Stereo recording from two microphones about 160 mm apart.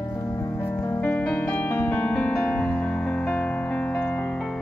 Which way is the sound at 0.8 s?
15° left (ahead or behind).